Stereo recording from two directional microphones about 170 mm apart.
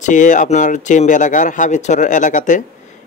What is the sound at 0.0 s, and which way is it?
Speech, 45° left (ahead or behind).